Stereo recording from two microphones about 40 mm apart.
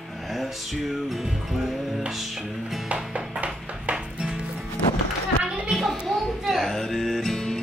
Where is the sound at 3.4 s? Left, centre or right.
Right.